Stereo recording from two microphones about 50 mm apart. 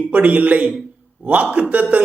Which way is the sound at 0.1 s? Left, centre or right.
Right.